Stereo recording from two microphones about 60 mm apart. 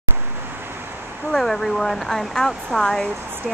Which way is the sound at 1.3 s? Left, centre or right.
Centre.